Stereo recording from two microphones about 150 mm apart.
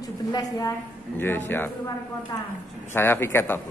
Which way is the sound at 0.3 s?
25° left (ahead or behind).